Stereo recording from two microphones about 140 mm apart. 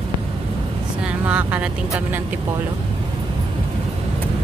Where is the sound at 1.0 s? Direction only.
10° right (ahead or behind).